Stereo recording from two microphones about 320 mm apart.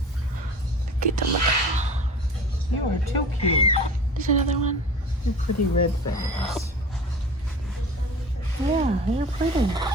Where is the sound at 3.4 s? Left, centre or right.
Centre.